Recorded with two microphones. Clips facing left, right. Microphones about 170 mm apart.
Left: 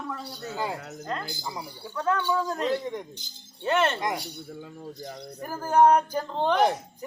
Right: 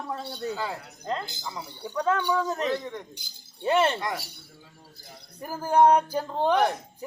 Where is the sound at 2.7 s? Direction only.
15° left (ahead or behind).